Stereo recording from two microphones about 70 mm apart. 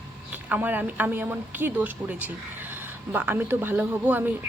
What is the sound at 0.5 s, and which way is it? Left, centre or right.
A woman's voice, right.